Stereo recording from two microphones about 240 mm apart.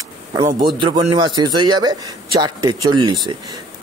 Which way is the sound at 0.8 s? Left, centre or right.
Centre.